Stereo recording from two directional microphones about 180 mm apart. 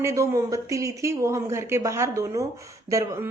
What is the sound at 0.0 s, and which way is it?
Speech, 15° right (ahead or behind).